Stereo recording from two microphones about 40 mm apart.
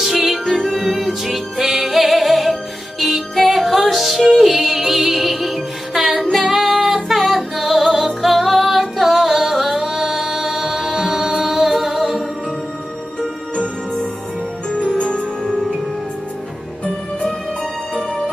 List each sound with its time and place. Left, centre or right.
0.0 s music: centre
15.0 s music: left